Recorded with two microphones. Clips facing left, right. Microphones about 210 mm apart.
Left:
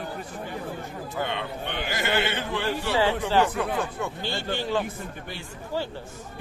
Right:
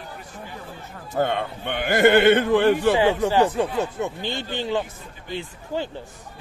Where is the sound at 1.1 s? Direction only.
45° right (ahead or behind).